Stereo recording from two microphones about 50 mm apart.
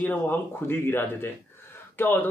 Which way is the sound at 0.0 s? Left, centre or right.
Left.